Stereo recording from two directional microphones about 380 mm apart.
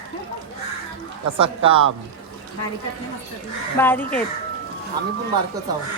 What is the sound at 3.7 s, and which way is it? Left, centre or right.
Speech, centre.